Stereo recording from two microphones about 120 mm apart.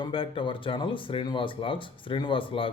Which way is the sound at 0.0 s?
45° left (ahead or behind).